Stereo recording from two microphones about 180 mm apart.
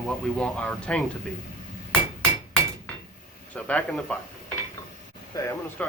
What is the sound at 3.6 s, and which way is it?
Speech, 5° left (ahead or behind).